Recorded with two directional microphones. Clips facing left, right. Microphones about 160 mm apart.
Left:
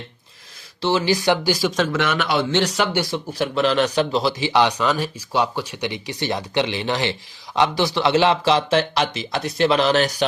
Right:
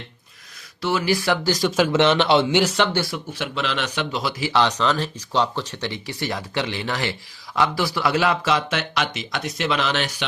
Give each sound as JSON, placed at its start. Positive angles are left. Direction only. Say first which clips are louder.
{"t": 0.8, "sound": "speech", "louder": "left 2 dB", "side_deg": 25}
{"t": 1.9, "sound": "speech", "louder": "right 4 dB", "side_deg": -25}
{"t": 2.5, "sound": "speech", "louder": "right 1 dB", "side_deg": -10}
{"t": 2.9, "sound": "speech", "louder": "left 2 dB", "side_deg": 20}
{"t": 3.3, "sound": "speech", "louder": "left 8 dB", "side_deg": 40}